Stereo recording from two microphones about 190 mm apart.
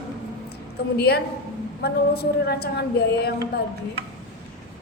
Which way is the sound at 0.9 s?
55° left (ahead or behind).